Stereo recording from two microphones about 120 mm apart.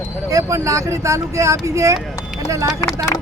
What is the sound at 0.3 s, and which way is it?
Speech, 25° right (ahead or behind).